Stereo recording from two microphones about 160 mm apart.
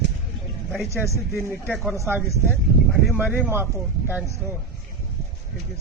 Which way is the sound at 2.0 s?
15° right (ahead or behind).